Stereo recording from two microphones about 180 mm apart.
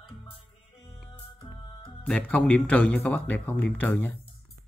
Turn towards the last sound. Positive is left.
turn(degrees=10)  # may be behind; listen again after turning